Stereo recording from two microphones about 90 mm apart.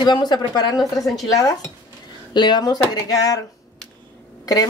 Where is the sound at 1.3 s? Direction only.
40° left (ahead or behind).